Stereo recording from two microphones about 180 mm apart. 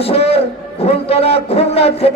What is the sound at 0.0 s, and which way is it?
A man's voice, 35° left (ahead or behind).